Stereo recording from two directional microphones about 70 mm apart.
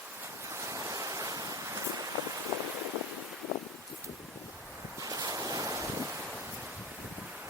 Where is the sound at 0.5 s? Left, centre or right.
Right.